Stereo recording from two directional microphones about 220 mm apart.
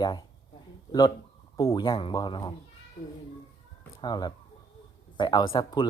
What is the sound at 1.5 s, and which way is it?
Speech, 15° left (ahead or behind).